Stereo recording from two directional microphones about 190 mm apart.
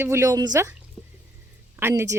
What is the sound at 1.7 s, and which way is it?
Speech, 15° right (ahead or behind).